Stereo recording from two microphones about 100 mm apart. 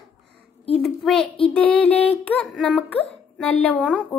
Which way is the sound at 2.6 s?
10° left (ahead or behind).